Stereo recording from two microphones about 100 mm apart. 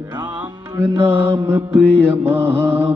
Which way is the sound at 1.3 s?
20° right (ahead or behind).